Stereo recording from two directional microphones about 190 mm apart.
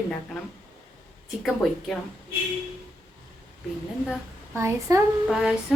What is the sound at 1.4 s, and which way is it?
Speech, centre (ahead or behind).